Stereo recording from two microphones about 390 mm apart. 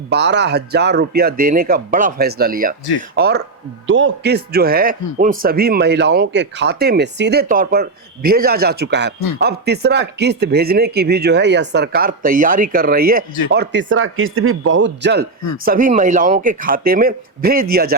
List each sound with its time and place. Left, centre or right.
0.1 s speech: right